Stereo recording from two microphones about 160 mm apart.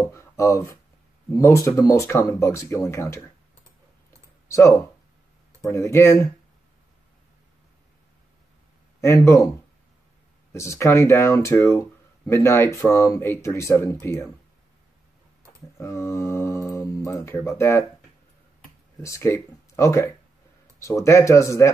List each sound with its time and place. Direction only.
0.0 s a sound: 15° left (ahead or behind)
1.3 s speech: 20° left (ahead or behind)
4.5 s speech: 15° left (ahead or behind)
9.0 s speech: 15° left (ahead or behind)
10.5 s speech: 15° left (ahead or behind)
15.8 s speech: 15° left (ahead or behind)
18.9 s speech: 20° left (ahead or behind)